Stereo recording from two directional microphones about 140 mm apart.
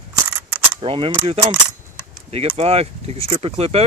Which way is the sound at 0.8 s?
40° right (ahead or behind).